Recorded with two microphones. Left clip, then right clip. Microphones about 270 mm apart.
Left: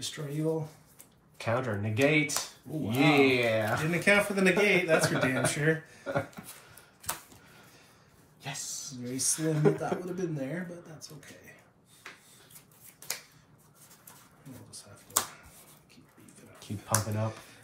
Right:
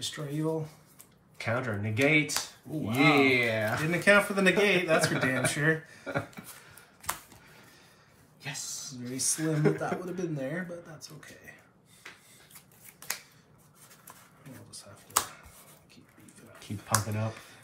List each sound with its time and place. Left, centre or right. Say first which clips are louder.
0.0 s speech: even; centre
8.4 s speech: even; centre
16.5 s speech: right 1 dB; centre